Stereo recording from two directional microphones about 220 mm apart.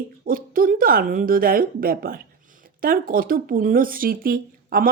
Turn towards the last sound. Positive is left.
turn(degrees=-40)  # may be behind; listen again after turning